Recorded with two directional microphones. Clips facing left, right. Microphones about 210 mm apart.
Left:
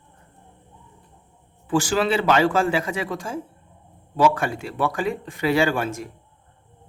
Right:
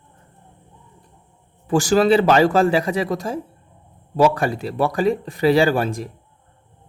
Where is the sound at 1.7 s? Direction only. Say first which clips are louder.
Right 6 dB; 40° right (ahead or behind).